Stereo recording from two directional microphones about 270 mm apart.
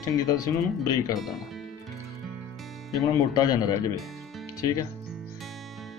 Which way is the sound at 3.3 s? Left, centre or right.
Centre.